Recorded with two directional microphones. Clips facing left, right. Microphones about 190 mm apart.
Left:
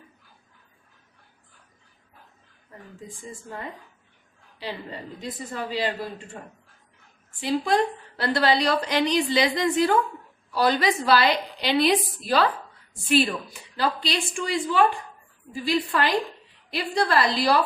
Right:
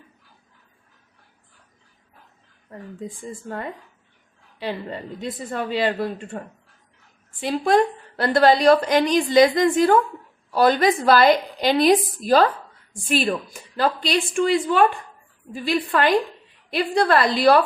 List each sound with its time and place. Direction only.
4.6 s a woman's voice: 55° right (ahead or behind)